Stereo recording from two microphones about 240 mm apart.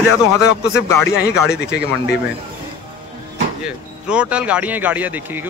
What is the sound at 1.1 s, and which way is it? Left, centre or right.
Speech, left.